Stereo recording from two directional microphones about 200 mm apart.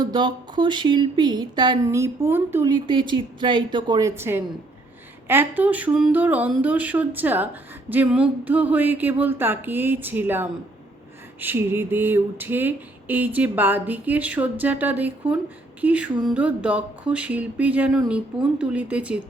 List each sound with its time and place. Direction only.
0.0 s speech: 20° right (ahead or behind); by 19.2 s 5° right (ahead or behind)